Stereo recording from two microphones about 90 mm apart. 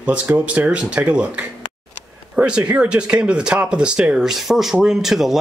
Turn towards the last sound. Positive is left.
turn(degrees=-5)  # may be behind; listen again after turning